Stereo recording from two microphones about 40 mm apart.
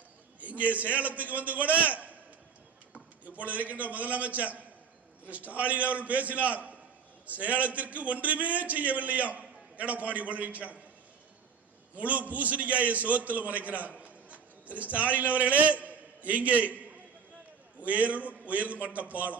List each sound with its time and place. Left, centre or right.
0.4 s a man's voice: right
3.3 s a man's voice: right
11.9 s a man's voice: right